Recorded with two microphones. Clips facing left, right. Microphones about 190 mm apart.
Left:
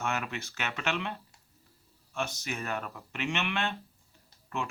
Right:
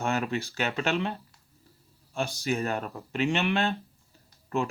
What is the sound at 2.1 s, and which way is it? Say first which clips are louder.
Speech: right 6 dB; 30° right (ahead or behind).